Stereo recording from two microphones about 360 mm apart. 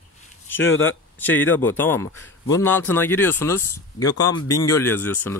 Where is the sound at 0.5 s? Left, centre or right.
Left.